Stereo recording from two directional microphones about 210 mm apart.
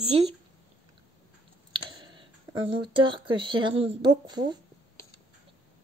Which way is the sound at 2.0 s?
20° right (ahead or behind).